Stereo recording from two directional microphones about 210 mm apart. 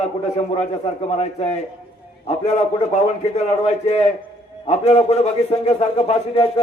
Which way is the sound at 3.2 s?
30° left (ahead or behind).